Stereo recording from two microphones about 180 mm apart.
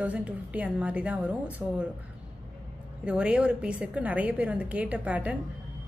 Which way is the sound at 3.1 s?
5° right (ahead or behind).